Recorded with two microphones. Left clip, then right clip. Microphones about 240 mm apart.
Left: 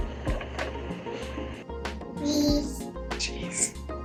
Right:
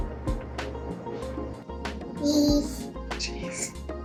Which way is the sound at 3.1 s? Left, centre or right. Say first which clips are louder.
Even; centre.